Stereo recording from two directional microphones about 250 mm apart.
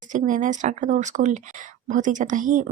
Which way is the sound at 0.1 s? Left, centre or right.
Right.